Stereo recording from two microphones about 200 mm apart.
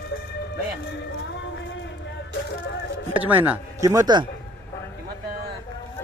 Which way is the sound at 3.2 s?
10° right (ahead or behind).